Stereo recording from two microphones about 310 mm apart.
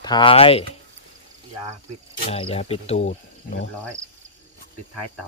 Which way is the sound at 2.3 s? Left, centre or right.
Centre.